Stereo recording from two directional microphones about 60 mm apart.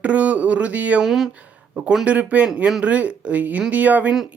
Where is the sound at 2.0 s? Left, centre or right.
Right.